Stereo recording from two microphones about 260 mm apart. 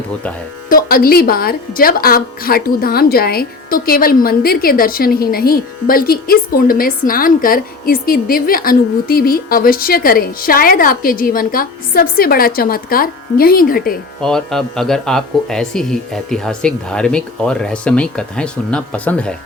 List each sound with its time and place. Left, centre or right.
0.7 s a woman's voice: left
14.2 s speech: centre